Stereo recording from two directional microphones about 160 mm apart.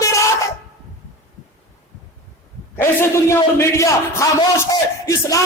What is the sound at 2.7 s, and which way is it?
A man's voice, 15° left (ahead or behind).